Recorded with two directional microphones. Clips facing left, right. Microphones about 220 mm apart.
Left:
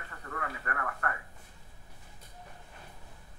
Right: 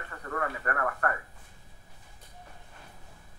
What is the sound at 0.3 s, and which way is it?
Speech, 45° right (ahead or behind).